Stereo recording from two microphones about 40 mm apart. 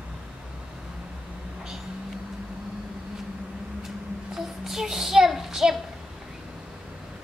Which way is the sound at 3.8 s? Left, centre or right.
Centre.